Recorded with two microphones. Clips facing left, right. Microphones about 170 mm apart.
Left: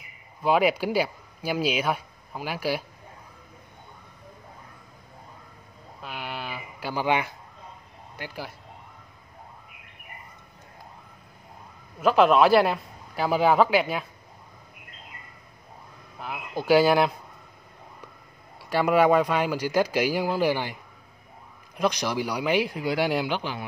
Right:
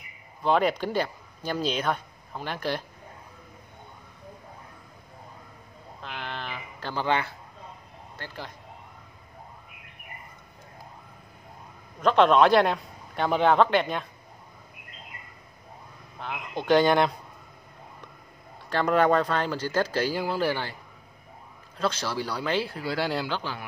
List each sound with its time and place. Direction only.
0.4 s speech: 10° left (ahead or behind)
6.0 s a sound: 10° left (ahead or behind)
8.2 s speech: 10° left (ahead or behind)
12.0 s a man's voice: 5° left (ahead or behind)
16.2 s a man's voice: 5° left (ahead or behind)
18.7 s speech: 10° left (ahead or behind)
21.7 s speech: 15° left (ahead or behind)